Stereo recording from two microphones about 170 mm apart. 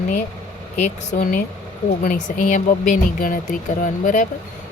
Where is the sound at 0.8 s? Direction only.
50° left (ahead or behind).